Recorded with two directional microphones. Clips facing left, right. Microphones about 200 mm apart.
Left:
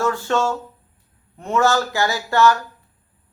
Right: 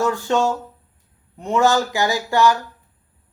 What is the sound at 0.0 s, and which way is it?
A man's voice, 15° right (ahead or behind).